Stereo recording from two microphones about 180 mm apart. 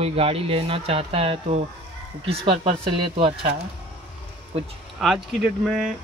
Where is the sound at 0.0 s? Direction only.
35° right (ahead or behind).